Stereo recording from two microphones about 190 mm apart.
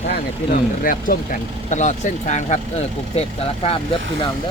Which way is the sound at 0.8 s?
45° left (ahead or behind).